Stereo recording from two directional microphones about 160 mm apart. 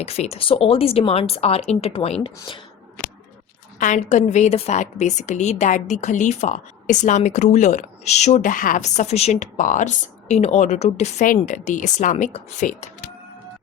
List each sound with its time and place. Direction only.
0.0 s speech: 40° left (ahead or behind)
3.8 s a woman's voice: 50° left (ahead or behind)